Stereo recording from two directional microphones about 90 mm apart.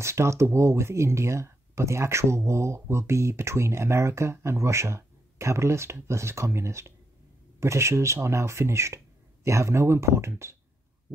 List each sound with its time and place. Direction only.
0.0 s speech: 30° right (ahead or behind)